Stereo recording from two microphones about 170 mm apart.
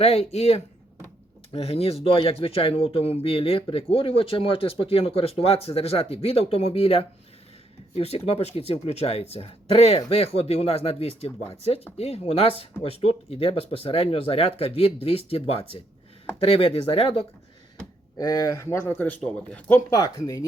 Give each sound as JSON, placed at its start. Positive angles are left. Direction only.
{"t": 0.0, "sound": "speech", "side_deg": 35}
{"t": 18.2, "sound": "a man's voice", "side_deg": 20}
{"t": 19.9, "sound": "speech", "side_deg": 20}